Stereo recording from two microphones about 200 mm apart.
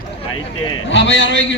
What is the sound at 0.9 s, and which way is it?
Speech, 65° left (ahead or behind).